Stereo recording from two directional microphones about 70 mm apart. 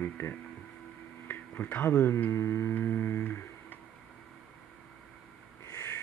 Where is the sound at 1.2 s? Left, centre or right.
Left.